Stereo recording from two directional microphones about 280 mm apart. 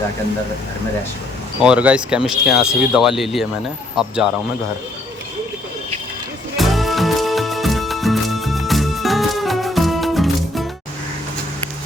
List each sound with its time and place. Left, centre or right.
1.6 s speech: centre
6.6 s music: centre